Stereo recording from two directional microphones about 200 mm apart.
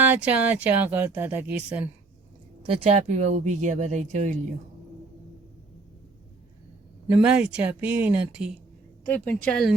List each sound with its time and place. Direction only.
0.0 s speech: 5° right (ahead or behind)
2.6 s speech: 30° right (ahead or behind)
7.1 s speech: 5° right (ahead or behind)
9.0 s speech: 10° left (ahead or behind)